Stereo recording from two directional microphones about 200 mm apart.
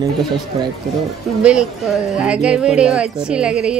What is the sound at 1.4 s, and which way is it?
A woman's voice, 5° right (ahead or behind).